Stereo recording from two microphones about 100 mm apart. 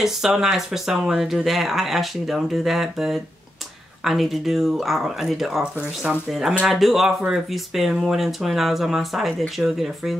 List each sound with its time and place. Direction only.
0.0 s speech: 5° right (ahead or behind)
6.6 s speech: centre (ahead or behind)